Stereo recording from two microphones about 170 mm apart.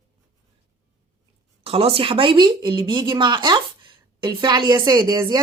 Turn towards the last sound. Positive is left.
turn(degrees=-25)  # may be behind; listen again after turning